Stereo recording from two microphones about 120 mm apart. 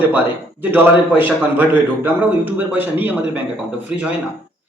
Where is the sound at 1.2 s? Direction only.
15° right (ahead or behind).